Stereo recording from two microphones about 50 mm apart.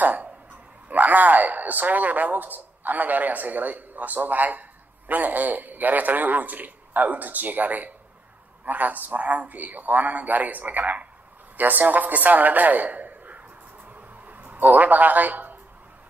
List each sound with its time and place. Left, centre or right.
0.0 s dog: right
0.8 s a man's voice: right
13.8 s a sound: right